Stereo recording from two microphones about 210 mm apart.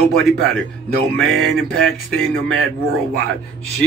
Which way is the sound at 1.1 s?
5° left (ahead or behind).